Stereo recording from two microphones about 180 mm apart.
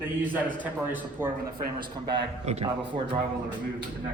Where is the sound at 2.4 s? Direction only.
35° right (ahead or behind).